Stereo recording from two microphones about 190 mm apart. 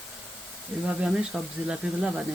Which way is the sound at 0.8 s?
5° right (ahead or behind).